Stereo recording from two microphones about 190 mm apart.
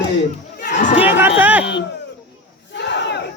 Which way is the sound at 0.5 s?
40° left (ahead or behind).